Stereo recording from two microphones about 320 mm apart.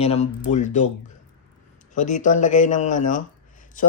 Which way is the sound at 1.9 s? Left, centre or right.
Left.